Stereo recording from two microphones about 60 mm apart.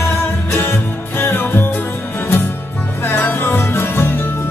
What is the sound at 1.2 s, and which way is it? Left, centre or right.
Music, left.